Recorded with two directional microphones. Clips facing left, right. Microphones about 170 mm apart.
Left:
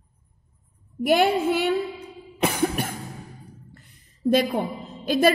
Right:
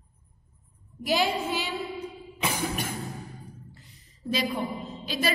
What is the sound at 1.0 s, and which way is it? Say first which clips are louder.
Speech: left 7 dB; 55° left (ahead or behind).